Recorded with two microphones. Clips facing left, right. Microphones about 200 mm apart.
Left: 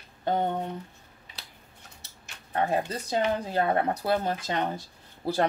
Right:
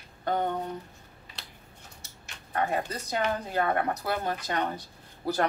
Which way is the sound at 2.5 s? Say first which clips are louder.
Left 2 dB; 30° left (ahead or behind).